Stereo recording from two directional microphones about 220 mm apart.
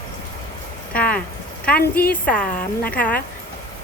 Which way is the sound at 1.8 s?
45° left (ahead or behind).